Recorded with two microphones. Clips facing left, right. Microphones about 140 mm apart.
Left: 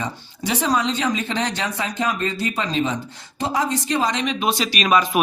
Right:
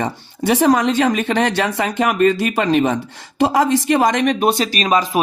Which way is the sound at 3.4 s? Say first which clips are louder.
Right 8 dB; 90° right.